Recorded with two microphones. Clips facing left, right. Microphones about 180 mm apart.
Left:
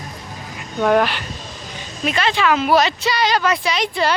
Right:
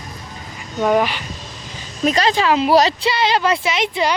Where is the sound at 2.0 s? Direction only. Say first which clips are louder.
Right 3 dB; 40° right (ahead or behind).